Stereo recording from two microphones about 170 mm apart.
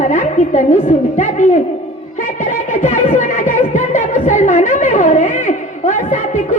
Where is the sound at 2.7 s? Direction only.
45° left (ahead or behind).